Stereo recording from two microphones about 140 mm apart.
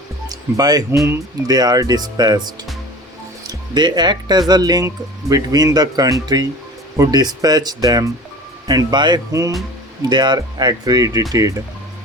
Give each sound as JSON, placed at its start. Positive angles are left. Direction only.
{"t": 0.3, "sound": "speech", "side_deg": -25}
{"t": 3.4, "sound": "speech", "side_deg": -30}